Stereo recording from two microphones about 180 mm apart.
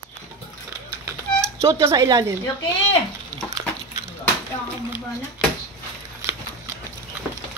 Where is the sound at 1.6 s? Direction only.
20° right (ahead or behind).